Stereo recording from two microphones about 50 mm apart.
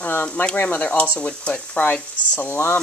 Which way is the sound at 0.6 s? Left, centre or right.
Left.